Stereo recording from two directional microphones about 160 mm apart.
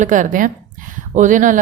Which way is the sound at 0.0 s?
55° right (ahead or behind).